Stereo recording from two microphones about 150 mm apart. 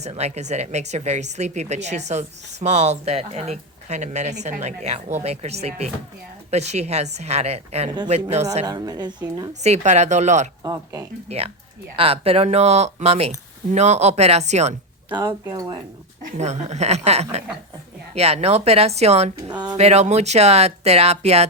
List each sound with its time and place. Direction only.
0.0 s speech: 45° right (ahead or behind)
8.6 s a woman's voice: 25° right (ahead or behind)
9.5 s speech: 50° right (ahead or behind)
10.6 s a woman's voice: 20° right (ahead or behind)
11.3 s speech: 40° right (ahead or behind)
15.2 s a woman's voice: 25° right (ahead or behind)
16.4 s speech: 50° right (ahead or behind)
19.4 s a woman's voice: 25° right (ahead or behind)
19.7 s speech: 45° right (ahead or behind)